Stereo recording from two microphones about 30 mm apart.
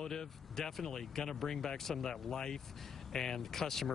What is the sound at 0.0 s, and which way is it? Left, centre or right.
Speech, centre.